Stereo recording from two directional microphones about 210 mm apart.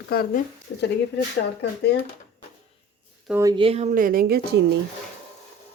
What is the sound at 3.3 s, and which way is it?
Speech, 15° right (ahead or behind).